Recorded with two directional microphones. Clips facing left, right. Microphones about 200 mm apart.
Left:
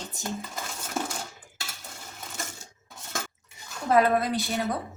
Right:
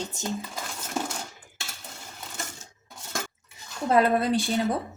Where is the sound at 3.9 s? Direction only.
25° right (ahead or behind).